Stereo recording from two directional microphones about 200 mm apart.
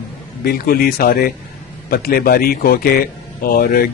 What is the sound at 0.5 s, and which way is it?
A man's voice, 50° left (ahead or behind).